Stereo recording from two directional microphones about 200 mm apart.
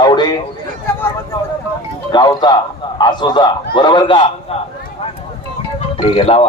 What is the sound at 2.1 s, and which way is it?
A man's voice, 20° left (ahead or behind).